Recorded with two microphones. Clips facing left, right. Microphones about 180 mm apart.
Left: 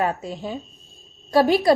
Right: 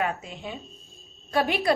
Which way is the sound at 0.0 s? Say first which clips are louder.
Left 5 dB; 35° left (ahead or behind).